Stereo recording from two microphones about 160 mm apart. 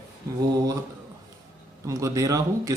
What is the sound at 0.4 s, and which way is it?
Speech, 20° right (ahead or behind).